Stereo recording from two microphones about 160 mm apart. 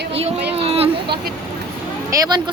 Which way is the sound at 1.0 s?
90° right.